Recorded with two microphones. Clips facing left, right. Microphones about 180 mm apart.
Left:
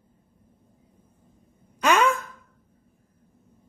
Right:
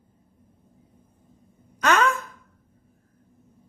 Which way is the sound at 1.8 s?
10° left (ahead or behind).